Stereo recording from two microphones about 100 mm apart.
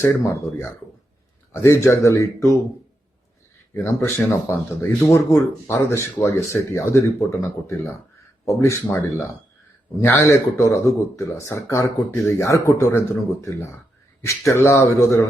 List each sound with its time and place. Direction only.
0.0 s speech: 25° left (ahead or behind)
4.3 s speech: 30° left (ahead or behind)